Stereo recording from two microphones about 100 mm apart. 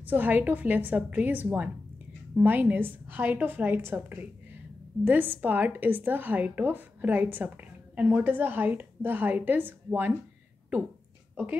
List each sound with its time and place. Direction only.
0.0 s a woman's voice: 15° right (ahead or behind)